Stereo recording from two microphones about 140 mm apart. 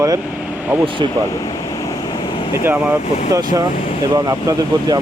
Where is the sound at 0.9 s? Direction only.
35° right (ahead or behind).